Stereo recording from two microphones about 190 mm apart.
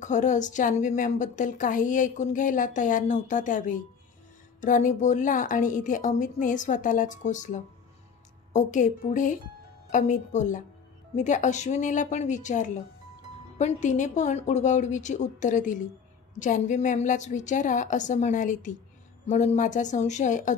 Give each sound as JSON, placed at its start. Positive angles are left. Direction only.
{"t": 0.0, "sound": "a woman's voice", "side_deg": 40}